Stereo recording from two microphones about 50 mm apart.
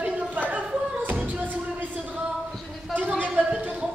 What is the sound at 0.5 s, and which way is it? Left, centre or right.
Beatboxing, right.